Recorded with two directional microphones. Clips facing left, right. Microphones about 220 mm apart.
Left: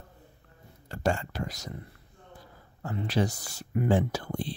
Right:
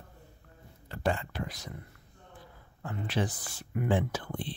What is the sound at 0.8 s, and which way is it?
Speech, 40° left (ahead or behind).